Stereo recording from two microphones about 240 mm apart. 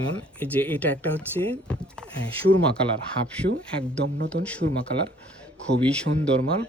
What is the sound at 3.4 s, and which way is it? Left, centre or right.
Speech, right.